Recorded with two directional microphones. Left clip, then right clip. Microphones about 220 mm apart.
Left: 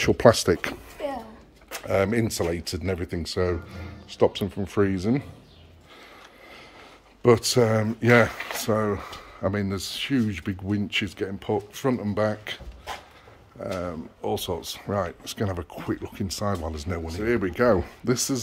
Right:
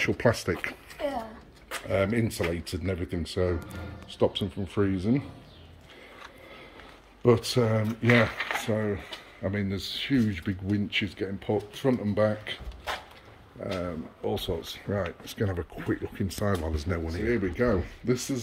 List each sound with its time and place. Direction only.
0.0 s speech: 25° left (ahead or behind)
1.7 s speech: 15° left (ahead or behind)
7.2 s speech: 15° left (ahead or behind)
17.3 s speech: 15° left (ahead or behind)